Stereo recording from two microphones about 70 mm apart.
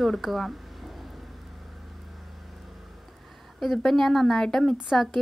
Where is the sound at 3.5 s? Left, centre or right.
Centre.